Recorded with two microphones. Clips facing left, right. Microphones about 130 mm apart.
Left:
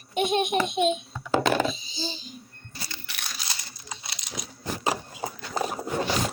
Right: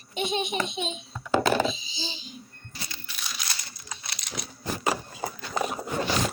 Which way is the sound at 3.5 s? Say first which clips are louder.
Left 1 dB; 25° left (ahead or behind).